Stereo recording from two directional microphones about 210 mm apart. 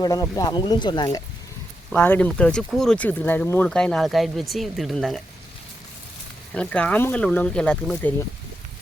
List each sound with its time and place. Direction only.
0.0 s speech: 15° left (ahead or behind)
1.9 s speech: 5° left (ahead or behind)
6.5 s speech: 5° left (ahead or behind)